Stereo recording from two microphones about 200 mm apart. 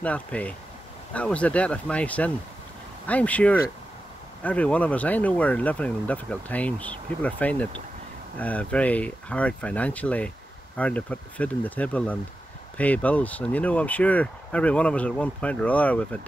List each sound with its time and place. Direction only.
0.0 s speech: 5° left (ahead or behind)